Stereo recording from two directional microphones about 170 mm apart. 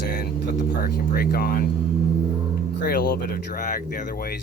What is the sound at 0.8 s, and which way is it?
Speech, 60° left (ahead or behind).